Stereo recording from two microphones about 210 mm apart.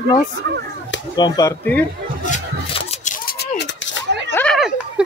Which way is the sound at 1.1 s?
20° left (ahead or behind).